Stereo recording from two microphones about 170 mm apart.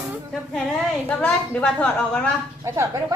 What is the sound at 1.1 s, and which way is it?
A woman's voice, 5° left (ahead or behind).